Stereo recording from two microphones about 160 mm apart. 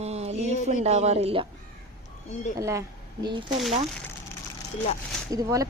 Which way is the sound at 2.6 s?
20° right (ahead or behind).